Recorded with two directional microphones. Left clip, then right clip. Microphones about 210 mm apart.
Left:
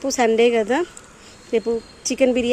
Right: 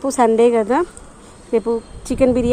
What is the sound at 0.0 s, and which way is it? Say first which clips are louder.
Speech: right 3 dB; 5° left (ahead or behind).